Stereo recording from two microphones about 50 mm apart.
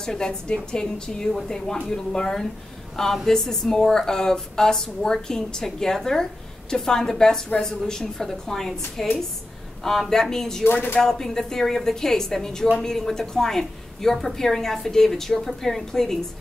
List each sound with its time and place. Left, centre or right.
0.0 s a woman's voice: centre
10.6 s speech: left
11.0 s a woman's voice: centre